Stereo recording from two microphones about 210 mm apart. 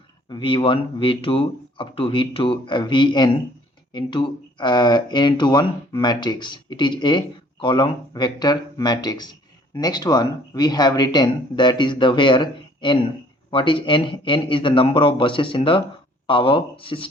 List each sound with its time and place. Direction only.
0.3 s speech: 20° left (ahead or behind)